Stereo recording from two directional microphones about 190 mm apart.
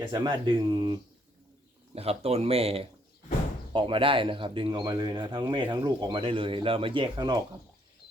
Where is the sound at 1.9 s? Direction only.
30° right (ahead or behind).